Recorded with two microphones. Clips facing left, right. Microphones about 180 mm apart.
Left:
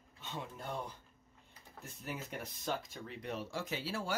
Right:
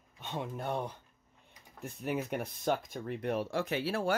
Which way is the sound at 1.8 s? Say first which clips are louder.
Right 10 dB; 60° right (ahead or behind).